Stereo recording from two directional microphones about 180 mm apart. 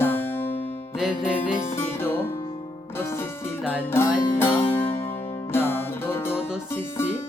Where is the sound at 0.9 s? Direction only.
5° right (ahead or behind).